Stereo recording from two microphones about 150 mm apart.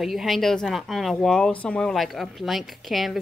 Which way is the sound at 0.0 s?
Centre (ahead or behind).